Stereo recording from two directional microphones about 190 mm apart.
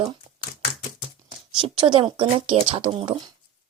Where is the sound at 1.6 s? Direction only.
25° right (ahead or behind).